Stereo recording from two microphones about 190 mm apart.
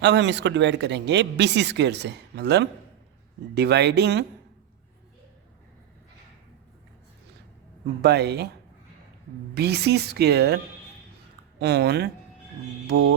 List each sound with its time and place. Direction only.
0.0 s speech: 65° right (ahead or behind)
8.0 s speech: 60° right (ahead or behind)
9.6 s speech: 60° right (ahead or behind)
11.6 s speech: 55° right (ahead or behind)